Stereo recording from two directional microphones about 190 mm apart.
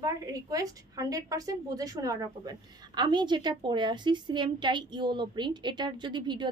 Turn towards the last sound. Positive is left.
turn(degrees=-25)  # may be behind; listen again after turning